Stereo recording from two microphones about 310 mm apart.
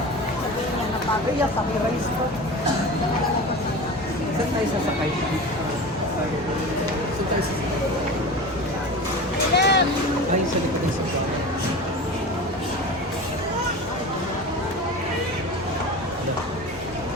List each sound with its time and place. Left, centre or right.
9.6 s music: left